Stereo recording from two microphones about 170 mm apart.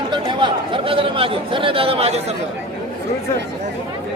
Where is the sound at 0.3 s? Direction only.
30° right (ahead or behind).